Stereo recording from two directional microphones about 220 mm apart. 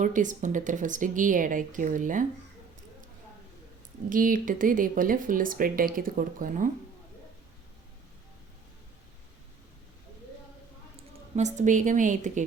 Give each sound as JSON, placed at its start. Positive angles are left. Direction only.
{"t": 0.0, "sound": "speech", "side_deg": -35}
{"t": 4.1, "sound": "speech", "side_deg": -40}
{"t": 11.3, "sound": "speech", "side_deg": -30}